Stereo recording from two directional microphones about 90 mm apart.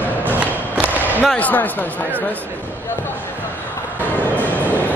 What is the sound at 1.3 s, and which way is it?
Speech, 20° left (ahead or behind).